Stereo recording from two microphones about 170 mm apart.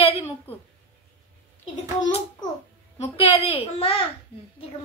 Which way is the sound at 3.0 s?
35° left (ahead or behind).